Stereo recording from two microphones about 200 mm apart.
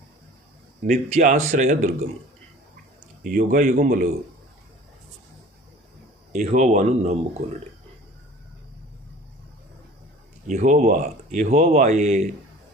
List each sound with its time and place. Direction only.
1.1 s speech: 35° right (ahead or behind)
3.2 s speech: 40° right (ahead or behind)
6.3 s speech: 40° right (ahead or behind)
10.4 s speech: 35° right (ahead or behind)